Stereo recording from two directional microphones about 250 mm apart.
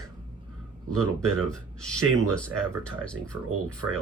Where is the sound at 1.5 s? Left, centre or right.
Centre.